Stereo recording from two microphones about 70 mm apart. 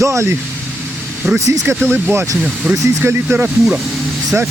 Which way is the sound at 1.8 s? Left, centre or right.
Right.